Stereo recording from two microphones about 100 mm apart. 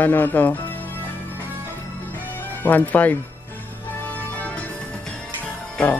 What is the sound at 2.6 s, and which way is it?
Speech, 15° left (ahead or behind).